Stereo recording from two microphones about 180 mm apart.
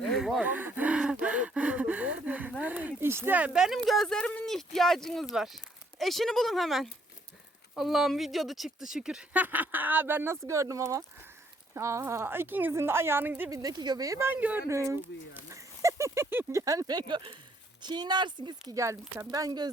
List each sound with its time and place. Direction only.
0.0 s speech: centre (ahead or behind); by 19.7 s 20° right (ahead or behind)